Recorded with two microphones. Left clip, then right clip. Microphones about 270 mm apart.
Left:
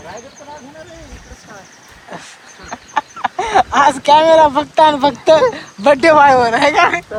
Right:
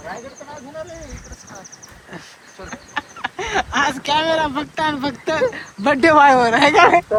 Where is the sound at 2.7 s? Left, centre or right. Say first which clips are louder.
Left 8 dB; centre.